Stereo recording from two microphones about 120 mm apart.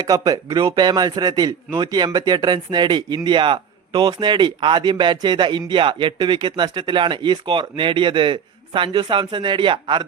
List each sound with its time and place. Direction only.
0.0 s a man's voice: 30° right (ahead or behind)